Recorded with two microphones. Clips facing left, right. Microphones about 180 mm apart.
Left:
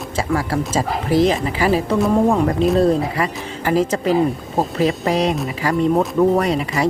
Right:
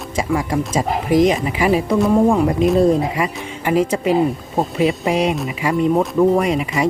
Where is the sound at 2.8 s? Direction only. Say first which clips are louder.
Right 1 dB; 10° right (ahead or behind).